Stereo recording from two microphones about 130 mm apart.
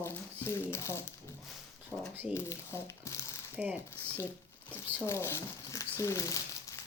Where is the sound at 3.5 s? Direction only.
10° right (ahead or behind).